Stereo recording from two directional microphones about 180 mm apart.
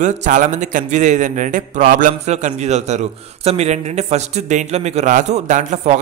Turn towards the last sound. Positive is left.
turn(degrees=-40)  # may be behind; listen again after turning